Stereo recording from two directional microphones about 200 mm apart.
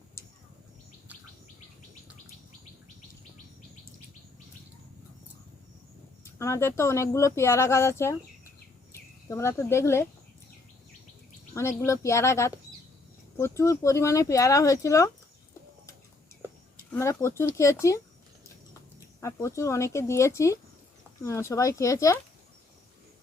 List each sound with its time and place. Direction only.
6.2 s speech: 15° left (ahead or behind)
11.5 s speech: 15° left (ahead or behind)
16.7 s speech: 15° left (ahead or behind)